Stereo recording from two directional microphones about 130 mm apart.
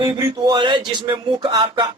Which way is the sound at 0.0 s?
35° right (ahead or behind).